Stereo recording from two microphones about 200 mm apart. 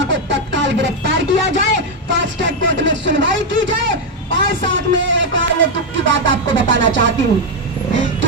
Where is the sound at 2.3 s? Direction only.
65° right (ahead or behind).